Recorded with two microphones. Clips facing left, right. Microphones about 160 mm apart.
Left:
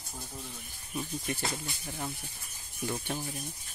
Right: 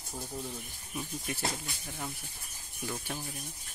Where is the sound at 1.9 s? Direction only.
5° left (ahead or behind).